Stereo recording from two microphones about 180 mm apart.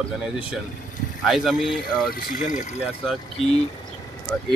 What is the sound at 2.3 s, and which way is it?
Speech, 45° left (ahead or behind).